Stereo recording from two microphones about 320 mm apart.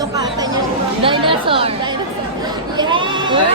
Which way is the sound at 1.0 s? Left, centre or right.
Centre.